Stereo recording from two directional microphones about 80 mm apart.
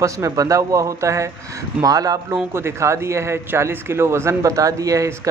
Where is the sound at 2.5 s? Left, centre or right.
Right.